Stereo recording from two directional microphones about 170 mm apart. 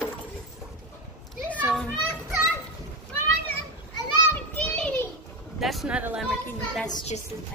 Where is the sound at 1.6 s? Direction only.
5° right (ahead or behind).